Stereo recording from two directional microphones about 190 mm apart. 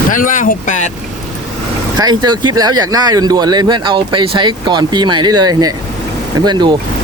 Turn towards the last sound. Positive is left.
turn(degrees=-25)  # may be behind; listen again after turning